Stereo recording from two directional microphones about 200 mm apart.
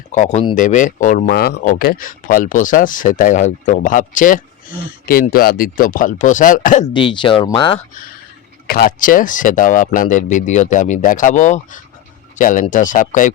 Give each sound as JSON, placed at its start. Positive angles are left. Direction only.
{"t": 0.1, "sound": "speech", "side_deg": 35}
{"t": 6.9, "sound": "speech", "side_deg": 25}
{"t": 8.6, "sound": "speech", "side_deg": 50}